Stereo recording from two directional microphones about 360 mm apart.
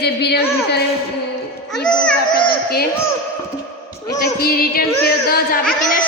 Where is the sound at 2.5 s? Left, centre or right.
Left.